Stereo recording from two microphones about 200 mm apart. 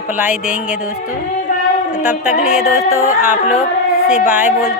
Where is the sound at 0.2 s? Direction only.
5° right (ahead or behind).